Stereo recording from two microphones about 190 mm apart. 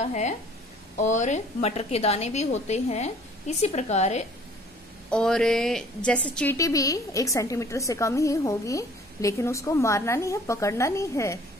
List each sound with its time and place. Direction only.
0.0 s a woman's voice: 40° left (ahead or behind)
5.1 s a woman's voice: 5° left (ahead or behind)